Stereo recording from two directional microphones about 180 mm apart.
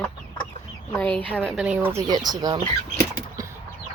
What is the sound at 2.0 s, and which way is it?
Speech, 20° right (ahead or behind).